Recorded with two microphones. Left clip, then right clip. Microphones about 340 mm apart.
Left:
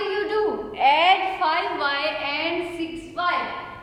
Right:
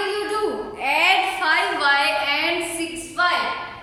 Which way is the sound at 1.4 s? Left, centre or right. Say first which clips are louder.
Right 3 dB; centre.